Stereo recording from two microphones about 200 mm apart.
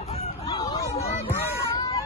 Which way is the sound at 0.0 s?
30° left (ahead or behind).